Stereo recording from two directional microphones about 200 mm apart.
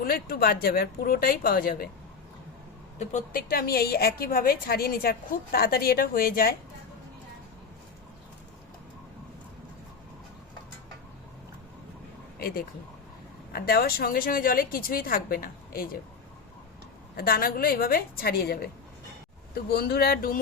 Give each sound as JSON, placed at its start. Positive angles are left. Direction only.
{"t": 0.0, "sound": "a woman's voice", "side_deg": 50}
{"t": 3.0, "sound": "a woman's voice", "side_deg": 35}
{"t": 12.4, "sound": "a woman's voice", "side_deg": 45}
{"t": 17.2, "sound": "a woman's voice", "side_deg": 50}